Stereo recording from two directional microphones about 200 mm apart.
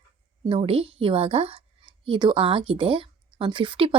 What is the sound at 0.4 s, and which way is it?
Speech, 30° right (ahead or behind).